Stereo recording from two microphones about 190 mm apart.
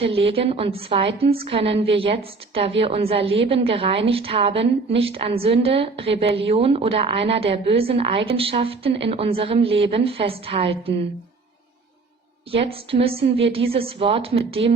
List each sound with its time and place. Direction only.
0.0 s a woman's voice: 30° right (ahead or behind)
12.5 s a woman's voice: 30° right (ahead or behind)